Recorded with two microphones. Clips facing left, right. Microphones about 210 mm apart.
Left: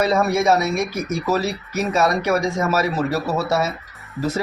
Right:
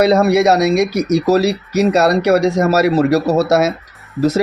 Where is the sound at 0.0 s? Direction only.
70° right (ahead or behind).